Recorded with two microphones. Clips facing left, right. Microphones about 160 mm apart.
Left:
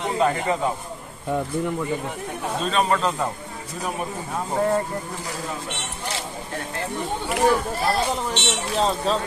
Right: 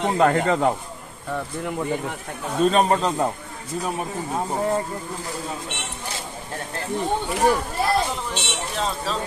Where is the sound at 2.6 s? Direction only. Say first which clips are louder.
Right 3 dB; 40° right (ahead or behind).